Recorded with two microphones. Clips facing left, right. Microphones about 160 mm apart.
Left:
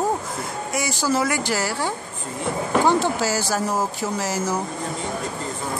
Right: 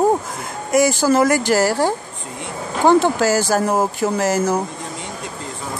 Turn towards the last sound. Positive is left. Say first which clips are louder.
# right 7 dB
turn(degrees=-55)  # may be behind; listen again after turning